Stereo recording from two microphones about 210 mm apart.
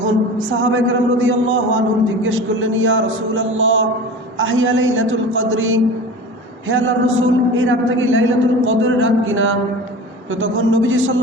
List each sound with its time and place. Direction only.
0.6 s a man's voice: 65° right (ahead or behind)